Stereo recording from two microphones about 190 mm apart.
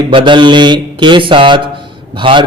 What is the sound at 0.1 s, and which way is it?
Mantra, 25° right (ahead or behind).